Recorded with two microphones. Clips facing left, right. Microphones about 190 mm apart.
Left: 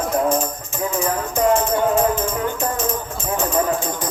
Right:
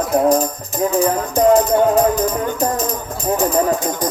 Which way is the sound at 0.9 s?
35° right (ahead or behind).